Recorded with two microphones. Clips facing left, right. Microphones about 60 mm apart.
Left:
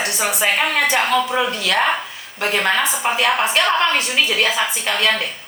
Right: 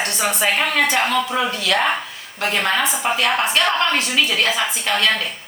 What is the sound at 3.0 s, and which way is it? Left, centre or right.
A woman's voice, centre.